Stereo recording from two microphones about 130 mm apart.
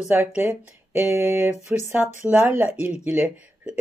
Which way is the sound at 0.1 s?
15° right (ahead or behind).